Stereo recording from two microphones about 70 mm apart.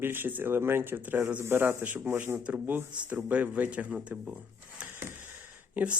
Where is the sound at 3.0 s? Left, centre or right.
Centre.